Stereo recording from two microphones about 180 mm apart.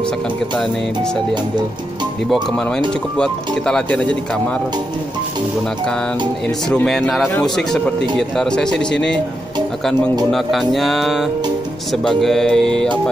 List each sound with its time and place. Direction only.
3.2 s speech: 5° left (ahead or behind)
6.7 s speech: 5° left (ahead or behind)
10.3 s speech: centre (ahead or behind)